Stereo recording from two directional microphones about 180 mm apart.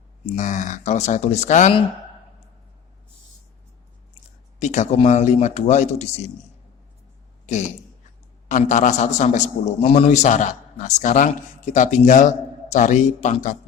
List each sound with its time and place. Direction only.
0.3 s a man's voice: 45° left (ahead or behind)
4.6 s speech: 40° left (ahead or behind)
8.4 s a man's voice: 45° left (ahead or behind)